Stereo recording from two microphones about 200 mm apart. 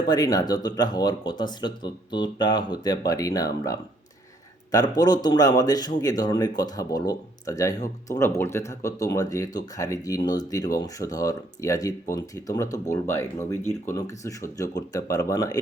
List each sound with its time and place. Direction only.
0.1 s speech: 20° left (ahead or behind)